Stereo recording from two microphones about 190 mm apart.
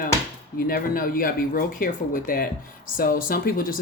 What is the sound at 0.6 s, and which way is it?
Speech, 50° left (ahead or behind).